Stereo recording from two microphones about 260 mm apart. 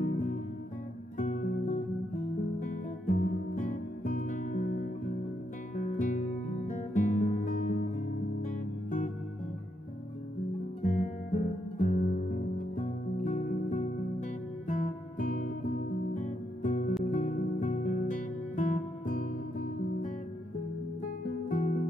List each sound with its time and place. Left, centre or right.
1.1 s music: left
5.8 s music: left
10.8 s guitar: left
12.7 s music: left
21.5 s music: left